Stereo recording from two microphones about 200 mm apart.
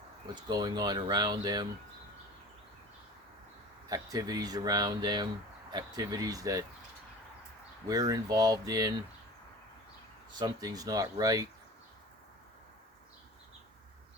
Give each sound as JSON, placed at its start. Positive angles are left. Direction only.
{"t": 0.5, "sound": "speech", "side_deg": -20}
{"t": 3.8, "sound": "speech", "side_deg": -20}
{"t": 7.9, "sound": "speech", "side_deg": -20}
{"t": 10.3, "sound": "speech", "side_deg": -20}